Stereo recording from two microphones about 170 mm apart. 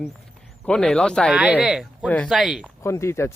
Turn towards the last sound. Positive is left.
turn(degrees=15)  # may be behind; listen again after turning